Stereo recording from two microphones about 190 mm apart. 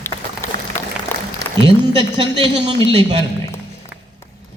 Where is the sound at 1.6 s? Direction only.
25° right (ahead or behind).